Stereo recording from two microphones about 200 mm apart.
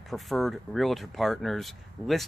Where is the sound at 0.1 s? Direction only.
Centre (ahead or behind).